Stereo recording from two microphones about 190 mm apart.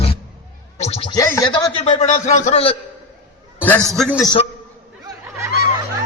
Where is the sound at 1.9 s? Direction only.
35° left (ahead or behind).